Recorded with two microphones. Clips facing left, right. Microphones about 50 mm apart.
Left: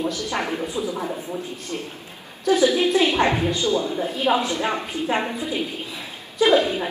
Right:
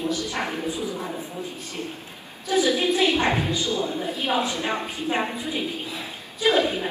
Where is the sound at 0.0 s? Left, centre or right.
Left.